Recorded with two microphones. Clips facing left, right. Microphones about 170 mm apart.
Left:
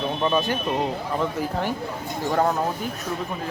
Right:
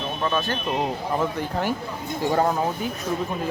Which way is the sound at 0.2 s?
15° left (ahead or behind).